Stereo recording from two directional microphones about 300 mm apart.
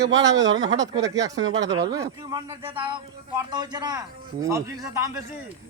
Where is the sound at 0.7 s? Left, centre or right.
Centre.